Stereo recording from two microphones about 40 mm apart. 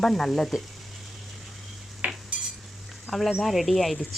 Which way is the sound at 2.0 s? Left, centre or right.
Right.